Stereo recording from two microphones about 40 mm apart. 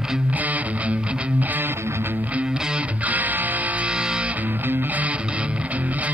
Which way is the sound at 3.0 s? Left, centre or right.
Right.